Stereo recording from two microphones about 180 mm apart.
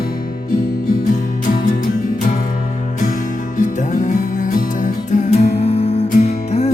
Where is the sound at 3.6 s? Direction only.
45° left (ahead or behind).